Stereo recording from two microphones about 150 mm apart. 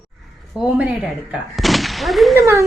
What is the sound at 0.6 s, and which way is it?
Speech, 10° right (ahead or behind).